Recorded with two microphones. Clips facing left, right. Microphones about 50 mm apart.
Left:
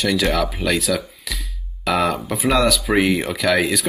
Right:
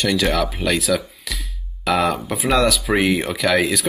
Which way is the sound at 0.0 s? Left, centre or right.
Centre.